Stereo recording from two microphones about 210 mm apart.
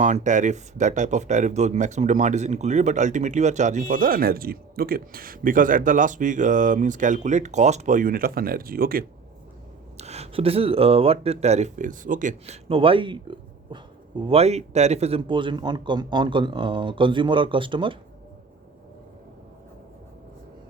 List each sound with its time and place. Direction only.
0.0 s speech: 35° right (ahead or behind)
10.0 s speech: 30° right (ahead or behind)